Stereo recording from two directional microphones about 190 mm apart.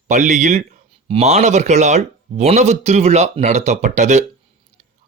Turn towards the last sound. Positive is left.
turn(degrees=-40)  # may be behind; listen again after turning